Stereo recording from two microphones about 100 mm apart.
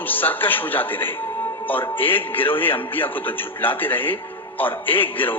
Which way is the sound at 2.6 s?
20° left (ahead or behind).